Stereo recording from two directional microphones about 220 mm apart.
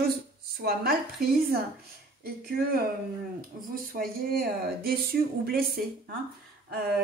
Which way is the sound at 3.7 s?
40° right (ahead or behind).